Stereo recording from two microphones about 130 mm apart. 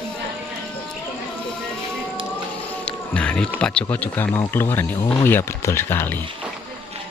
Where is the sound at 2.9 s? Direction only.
10° left (ahead or behind).